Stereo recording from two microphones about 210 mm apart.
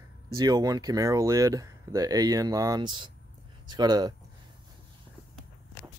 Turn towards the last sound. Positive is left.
turn(degrees=-20)  # may be behind; listen again after turning